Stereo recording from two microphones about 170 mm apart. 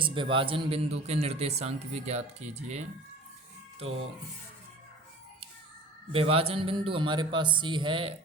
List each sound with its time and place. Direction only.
0.0 s a man's voice: 30° right (ahead or behind)
6.1 s a man's voice: 35° right (ahead or behind)